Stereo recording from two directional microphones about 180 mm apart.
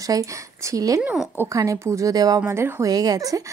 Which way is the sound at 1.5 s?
15° right (ahead or behind).